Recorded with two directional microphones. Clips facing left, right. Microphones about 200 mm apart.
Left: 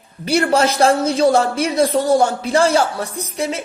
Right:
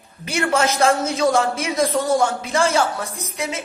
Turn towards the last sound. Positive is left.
turn(degrees=35)  # may be behind; listen again after turning